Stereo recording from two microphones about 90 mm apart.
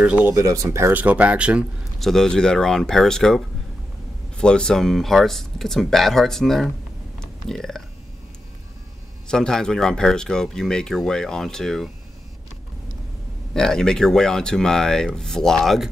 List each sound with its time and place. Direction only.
0.0 s speech: 15° right (ahead or behind)
0.3 s speech: 35° right (ahead or behind)
0.9 s speech: 15° right (ahead or behind)
2.0 s speech: 5° left (ahead or behind)
7.2 s burping: 5° left (ahead or behind)
9.3 s speech: 5° left (ahead or behind)
13.5 s speech: 5° left (ahead or behind)